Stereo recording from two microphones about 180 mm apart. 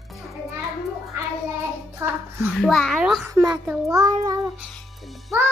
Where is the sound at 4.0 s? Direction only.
20° right (ahead or behind).